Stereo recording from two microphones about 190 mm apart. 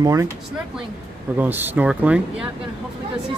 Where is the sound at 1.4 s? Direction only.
10° right (ahead or behind).